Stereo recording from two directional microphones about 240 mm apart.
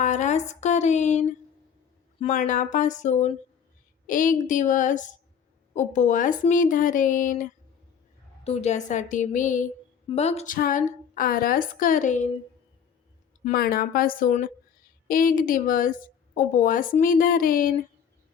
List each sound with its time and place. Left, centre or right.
0.0 s a sound: left
2.1 s a woman's voice: left
8.4 s a woman's voice: left
13.4 s a woman's voice: left